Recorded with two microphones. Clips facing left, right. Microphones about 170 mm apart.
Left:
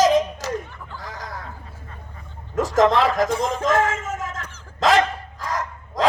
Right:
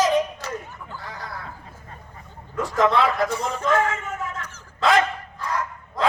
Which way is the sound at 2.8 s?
40° left (ahead or behind).